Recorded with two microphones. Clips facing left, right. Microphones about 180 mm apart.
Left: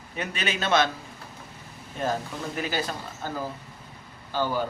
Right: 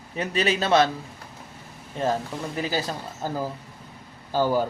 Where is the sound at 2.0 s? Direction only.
30° right (ahead or behind).